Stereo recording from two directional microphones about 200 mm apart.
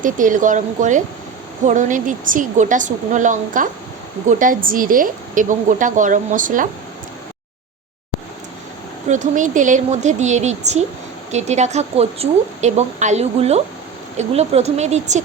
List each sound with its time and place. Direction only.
0.0 s speech: 40° right (ahead or behind)
9.0 s speech: 35° right (ahead or behind)